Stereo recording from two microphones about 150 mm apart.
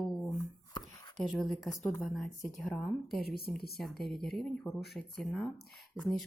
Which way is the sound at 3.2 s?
90° left.